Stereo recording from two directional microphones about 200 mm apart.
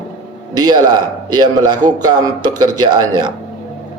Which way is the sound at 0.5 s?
20° right (ahead or behind).